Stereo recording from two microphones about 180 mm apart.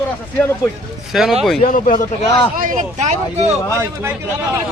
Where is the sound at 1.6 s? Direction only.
50° left (ahead or behind).